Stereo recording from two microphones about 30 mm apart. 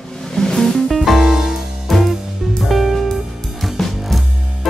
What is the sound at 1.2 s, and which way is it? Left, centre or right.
Music, centre.